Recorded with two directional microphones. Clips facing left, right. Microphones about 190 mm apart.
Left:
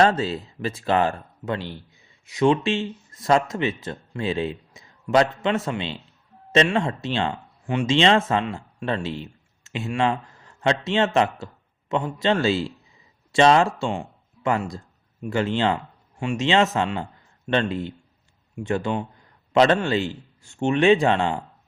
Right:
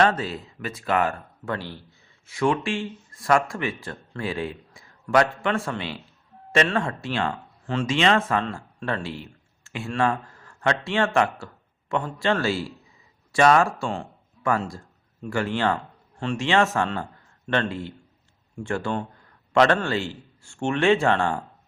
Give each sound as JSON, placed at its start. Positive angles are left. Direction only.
{"t": 0.0, "sound": "speech", "side_deg": 25}